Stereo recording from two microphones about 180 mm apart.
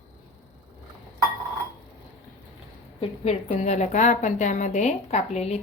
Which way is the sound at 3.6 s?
40° left (ahead or behind).